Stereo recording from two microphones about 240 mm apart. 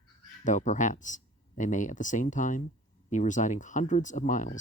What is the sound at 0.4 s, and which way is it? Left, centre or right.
Speech, left.